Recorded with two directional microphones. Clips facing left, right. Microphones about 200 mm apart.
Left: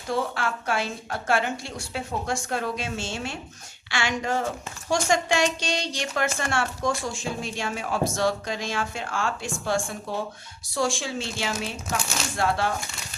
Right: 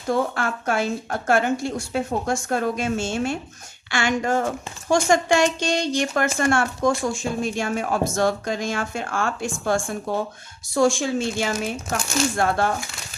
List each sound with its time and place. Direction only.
0.1 s speech: 50° right (ahead or behind)